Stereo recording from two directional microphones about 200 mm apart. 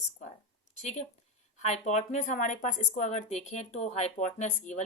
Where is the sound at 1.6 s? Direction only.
35° left (ahead or behind).